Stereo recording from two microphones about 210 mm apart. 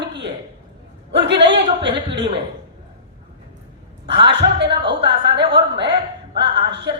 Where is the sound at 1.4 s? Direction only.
55° right (ahead or behind).